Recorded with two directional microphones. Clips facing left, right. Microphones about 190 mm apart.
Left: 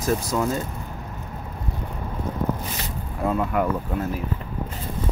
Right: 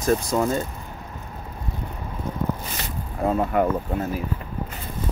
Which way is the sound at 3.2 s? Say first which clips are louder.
Right 2 dB; 35° right (ahead or behind).